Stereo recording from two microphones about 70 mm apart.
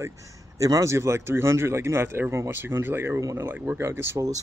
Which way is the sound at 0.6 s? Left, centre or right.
Right.